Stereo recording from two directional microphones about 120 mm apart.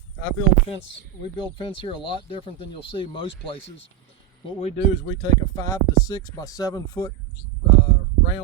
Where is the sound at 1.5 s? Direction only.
45° left (ahead or behind).